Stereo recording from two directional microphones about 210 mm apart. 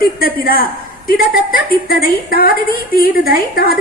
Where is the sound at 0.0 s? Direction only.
45° left (ahead or behind).